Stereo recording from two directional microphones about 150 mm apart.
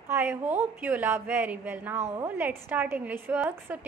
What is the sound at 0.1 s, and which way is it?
A woman's voice, 15° right (ahead or behind).